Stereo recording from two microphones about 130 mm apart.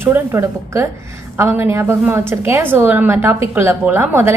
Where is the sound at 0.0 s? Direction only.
20° right (ahead or behind).